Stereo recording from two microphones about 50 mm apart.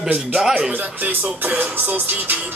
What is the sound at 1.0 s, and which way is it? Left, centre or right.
Speech, right.